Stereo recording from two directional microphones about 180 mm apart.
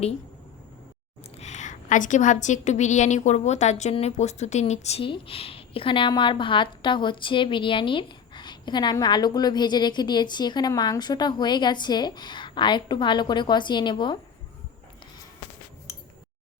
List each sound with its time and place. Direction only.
1.4 s a woman's voice: 40° left (ahead or behind); by 14.2 s 25° left (ahead or behind)